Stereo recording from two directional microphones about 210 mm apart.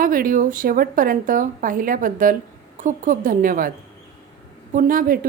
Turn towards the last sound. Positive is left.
turn(degrees=-40)  # may be behind; listen again after turning